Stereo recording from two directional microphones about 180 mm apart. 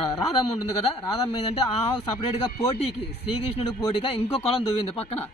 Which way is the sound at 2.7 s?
35° left (ahead or behind).